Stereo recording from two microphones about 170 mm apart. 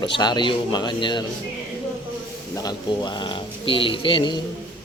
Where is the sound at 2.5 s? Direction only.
25° left (ahead or behind).